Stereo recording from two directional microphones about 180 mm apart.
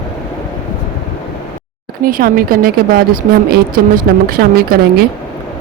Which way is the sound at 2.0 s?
50° right (ahead or behind).